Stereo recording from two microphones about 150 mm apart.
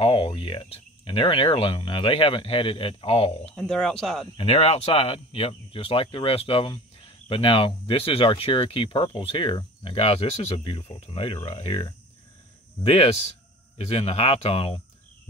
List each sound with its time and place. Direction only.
0.0 s speech: 35° left (ahead or behind)
3.5 s speech: 5° left (ahead or behind)
4.4 s speech: 40° left (ahead or behind)